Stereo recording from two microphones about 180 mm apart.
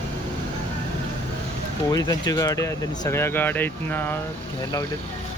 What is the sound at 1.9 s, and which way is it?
Speech, 20° left (ahead or behind).